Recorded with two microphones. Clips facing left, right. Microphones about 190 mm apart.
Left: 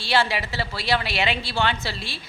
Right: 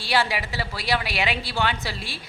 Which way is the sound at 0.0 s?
15° right (ahead or behind).